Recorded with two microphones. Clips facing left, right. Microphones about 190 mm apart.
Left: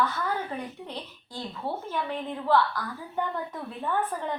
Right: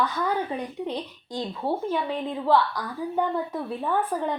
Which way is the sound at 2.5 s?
10° right (ahead or behind).